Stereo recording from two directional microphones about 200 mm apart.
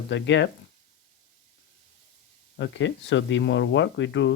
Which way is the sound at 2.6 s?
65° left (ahead or behind).